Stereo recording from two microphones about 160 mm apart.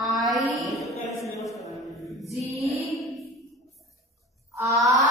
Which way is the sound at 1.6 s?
Centre (ahead or behind).